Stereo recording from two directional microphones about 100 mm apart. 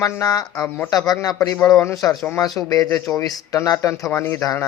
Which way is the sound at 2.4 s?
35° left (ahead or behind).